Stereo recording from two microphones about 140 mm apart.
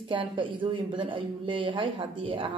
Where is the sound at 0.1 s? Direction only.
35° right (ahead or behind).